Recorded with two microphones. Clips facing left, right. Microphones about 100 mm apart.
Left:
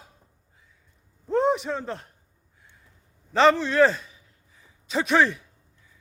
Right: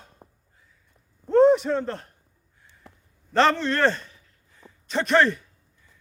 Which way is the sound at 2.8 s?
75° right (ahead or behind).